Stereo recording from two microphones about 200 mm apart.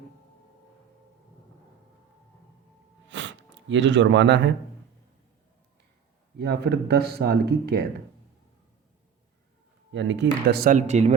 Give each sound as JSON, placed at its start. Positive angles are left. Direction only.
{"t": 3.1, "sound": "gasp", "side_deg": -70}
{"t": 6.4, "sound": "speech", "side_deg": -55}
{"t": 9.9, "sound": "speech", "side_deg": -65}
{"t": 10.2, "sound": "speech", "side_deg": -50}